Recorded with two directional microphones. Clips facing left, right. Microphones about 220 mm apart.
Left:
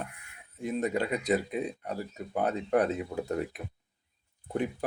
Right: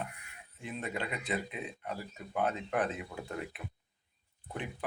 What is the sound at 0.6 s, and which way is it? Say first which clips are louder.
Speech: left 9 dB; 40° left (ahead or behind).